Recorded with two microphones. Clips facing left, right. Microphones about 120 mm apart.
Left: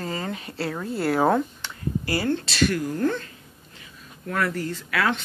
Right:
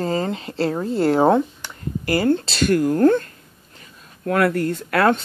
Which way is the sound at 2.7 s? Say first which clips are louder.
Right 9 dB; 50° right (ahead or behind).